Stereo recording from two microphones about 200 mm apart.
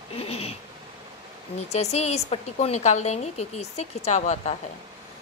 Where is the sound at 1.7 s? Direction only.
35° left (ahead or behind).